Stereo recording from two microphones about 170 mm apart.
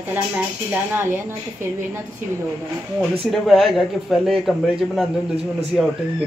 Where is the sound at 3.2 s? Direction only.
Centre (ahead or behind).